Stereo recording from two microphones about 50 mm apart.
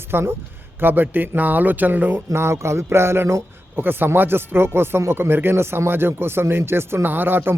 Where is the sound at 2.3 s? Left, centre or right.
Right.